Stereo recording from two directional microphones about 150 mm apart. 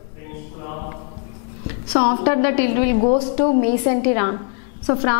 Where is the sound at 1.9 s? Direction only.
5° left (ahead or behind).